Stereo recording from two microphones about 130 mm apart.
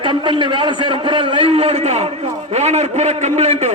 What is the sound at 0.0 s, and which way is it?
A man's voice, 40° right (ahead or behind).